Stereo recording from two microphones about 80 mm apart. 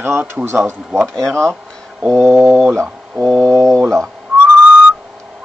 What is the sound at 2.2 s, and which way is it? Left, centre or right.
Speech, right.